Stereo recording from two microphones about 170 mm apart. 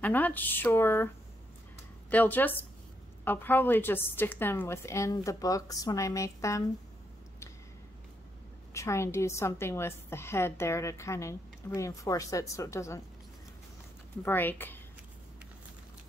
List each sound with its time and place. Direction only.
0.0 s a woman's voice: 10° left (ahead or behind)
8.7 s a woman's voice: 15° left (ahead or behind)
14.2 s a woman's voice: 10° left (ahead or behind)